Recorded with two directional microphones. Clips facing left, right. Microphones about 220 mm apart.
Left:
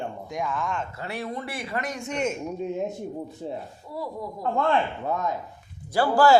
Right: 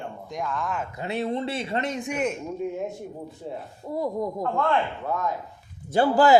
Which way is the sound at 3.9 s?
45° right (ahead or behind).